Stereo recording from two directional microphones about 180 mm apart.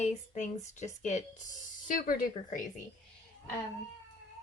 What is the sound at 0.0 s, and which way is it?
Speech, 40° left (ahead or behind).